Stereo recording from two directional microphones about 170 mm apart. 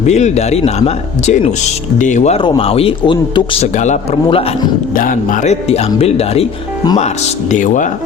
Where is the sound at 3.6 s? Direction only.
45° left (ahead or behind).